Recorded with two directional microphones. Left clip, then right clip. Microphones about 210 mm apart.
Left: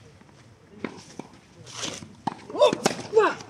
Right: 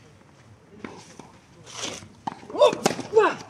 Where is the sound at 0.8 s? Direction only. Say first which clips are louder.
Left 4 dB; 25° left (ahead or behind).